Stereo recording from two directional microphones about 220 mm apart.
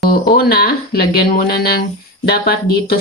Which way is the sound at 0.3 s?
40° left (ahead or behind).